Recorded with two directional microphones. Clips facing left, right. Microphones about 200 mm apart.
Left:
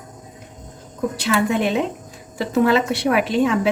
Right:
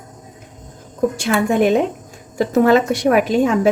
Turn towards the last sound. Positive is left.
turn(degrees=-45)  # may be behind; listen again after turning